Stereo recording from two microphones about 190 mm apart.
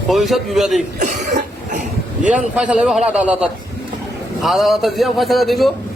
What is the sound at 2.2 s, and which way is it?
A man's voice, 5° right (ahead or behind).